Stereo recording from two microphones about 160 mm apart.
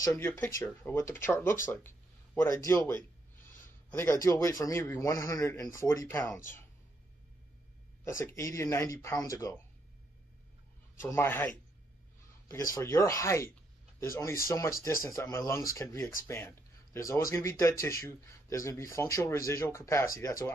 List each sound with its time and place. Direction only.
0.0 s speech: 15° left (ahead or behind)
8.0 s speech: 15° left (ahead or behind)
11.0 s speech: 15° left (ahead or behind)
12.7 s a man's voice: 20° left (ahead or behind)